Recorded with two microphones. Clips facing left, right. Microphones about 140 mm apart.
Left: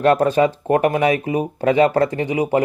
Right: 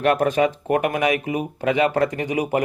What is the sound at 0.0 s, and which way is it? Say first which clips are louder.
Speech: left 3 dB; 30° left (ahead or behind).